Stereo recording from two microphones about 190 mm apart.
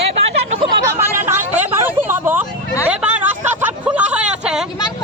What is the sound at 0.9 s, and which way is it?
Hubbub, 10° right (ahead or behind).